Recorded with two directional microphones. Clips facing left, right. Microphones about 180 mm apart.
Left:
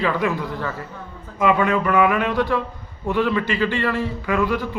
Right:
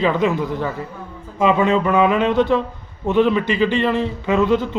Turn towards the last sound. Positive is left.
turn(degrees=-20)  # may be behind; listen again after turning